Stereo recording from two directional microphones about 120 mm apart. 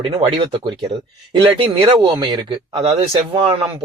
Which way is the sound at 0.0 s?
45° right (ahead or behind).